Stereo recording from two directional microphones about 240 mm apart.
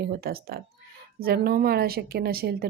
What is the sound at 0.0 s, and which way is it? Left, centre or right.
A woman's voice, right.